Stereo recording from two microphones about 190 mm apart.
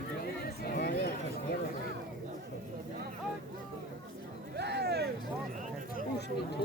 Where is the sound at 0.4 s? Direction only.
50° left (ahead or behind).